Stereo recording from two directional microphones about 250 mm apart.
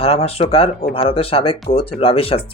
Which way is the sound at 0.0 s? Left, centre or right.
Left.